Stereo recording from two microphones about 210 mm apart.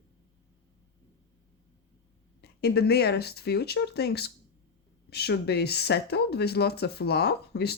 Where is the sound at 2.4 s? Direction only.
50° left (ahead or behind).